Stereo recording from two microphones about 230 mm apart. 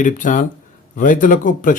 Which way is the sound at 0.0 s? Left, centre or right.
Left.